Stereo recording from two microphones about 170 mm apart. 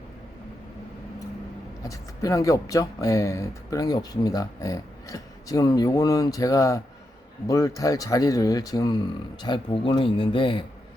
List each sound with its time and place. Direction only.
1.8 s speech: 20° left (ahead or behind)